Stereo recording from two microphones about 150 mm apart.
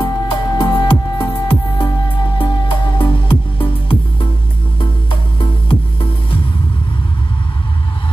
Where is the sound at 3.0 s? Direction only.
35° left (ahead or behind).